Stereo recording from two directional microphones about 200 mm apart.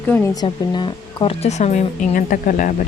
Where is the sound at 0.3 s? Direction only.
20° left (ahead or behind).